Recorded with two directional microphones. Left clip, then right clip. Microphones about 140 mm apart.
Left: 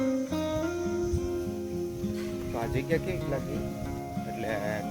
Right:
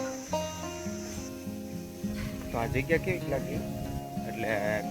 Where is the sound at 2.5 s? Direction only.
15° left (ahead or behind).